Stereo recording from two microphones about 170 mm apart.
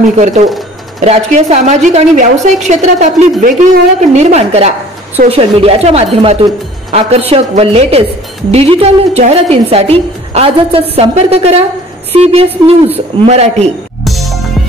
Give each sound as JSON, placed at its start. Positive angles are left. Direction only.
{"t": 0.2, "sound": "a woman's voice", "side_deg": -45}
{"t": 14.0, "sound": "music", "side_deg": 0}